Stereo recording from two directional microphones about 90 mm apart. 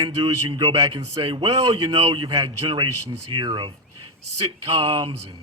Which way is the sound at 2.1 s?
60° right (ahead or behind).